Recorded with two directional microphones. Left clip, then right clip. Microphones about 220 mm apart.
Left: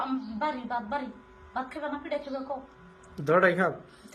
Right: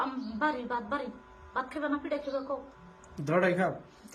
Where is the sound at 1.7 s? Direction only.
15° right (ahead or behind).